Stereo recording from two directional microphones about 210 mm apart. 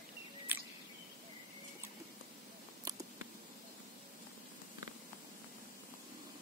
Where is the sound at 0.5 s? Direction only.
10° right (ahead or behind).